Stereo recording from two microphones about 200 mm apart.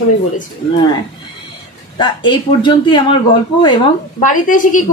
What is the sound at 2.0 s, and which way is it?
Speech, 25° left (ahead or behind).